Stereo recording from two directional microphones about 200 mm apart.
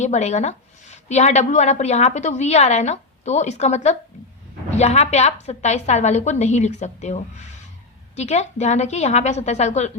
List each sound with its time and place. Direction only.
0.0 s a woman's voice: 35° left (ahead or behind)